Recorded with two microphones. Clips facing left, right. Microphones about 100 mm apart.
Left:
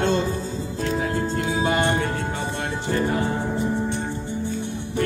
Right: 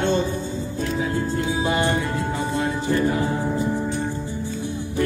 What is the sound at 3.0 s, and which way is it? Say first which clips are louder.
Music: even; 50° left (ahead or behind).